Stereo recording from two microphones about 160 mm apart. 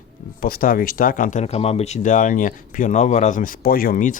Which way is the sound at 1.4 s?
40° left (ahead or behind).